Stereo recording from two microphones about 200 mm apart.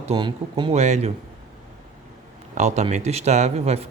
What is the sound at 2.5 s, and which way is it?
Speech, 35° right (ahead or behind).